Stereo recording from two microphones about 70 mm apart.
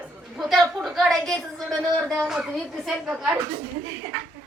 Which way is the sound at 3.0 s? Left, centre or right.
Centre.